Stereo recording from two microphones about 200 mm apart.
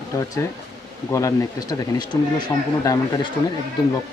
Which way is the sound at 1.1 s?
15° left (ahead or behind).